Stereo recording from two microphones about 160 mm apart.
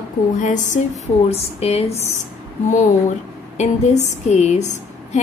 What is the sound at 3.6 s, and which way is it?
A woman's voice, 45° left (ahead or behind).